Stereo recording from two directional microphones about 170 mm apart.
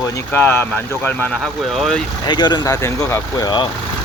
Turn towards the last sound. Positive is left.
turn(degrees=15)  # may be behind; listen again after turning